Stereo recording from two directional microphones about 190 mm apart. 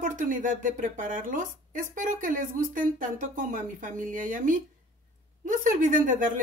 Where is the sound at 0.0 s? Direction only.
45° right (ahead or behind).